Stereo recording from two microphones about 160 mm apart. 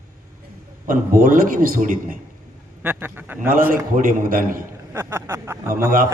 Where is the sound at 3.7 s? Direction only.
60° right (ahead or behind).